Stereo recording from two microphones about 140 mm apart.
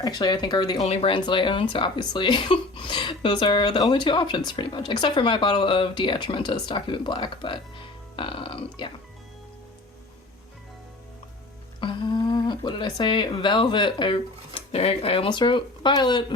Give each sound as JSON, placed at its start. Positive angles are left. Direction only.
{"t": 0.0, "sound": "speech", "side_deg": 30}
{"t": 0.9, "sound": "speech", "side_deg": 40}
{"t": 8.1, "sound": "burping", "side_deg": 40}
{"t": 11.8, "sound": "speech", "side_deg": 35}